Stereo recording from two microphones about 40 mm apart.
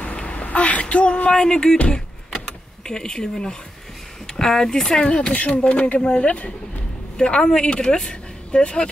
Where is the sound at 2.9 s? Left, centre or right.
Centre.